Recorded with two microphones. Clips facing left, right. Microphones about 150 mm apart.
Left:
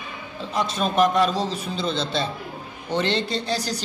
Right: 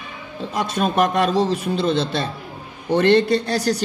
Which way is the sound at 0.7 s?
60° right (ahead or behind).